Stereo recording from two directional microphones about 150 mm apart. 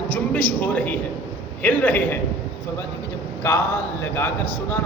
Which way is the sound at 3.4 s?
20° left (ahead or behind).